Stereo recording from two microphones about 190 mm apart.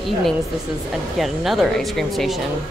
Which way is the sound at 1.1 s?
Centre (ahead or behind).